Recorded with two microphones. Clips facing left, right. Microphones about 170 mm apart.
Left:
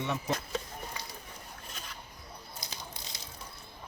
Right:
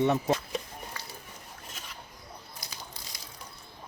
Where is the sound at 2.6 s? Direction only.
20° left (ahead or behind).